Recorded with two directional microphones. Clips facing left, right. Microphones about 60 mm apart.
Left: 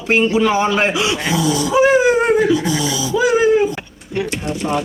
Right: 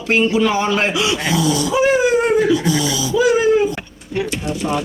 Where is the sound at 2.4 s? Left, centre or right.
Centre.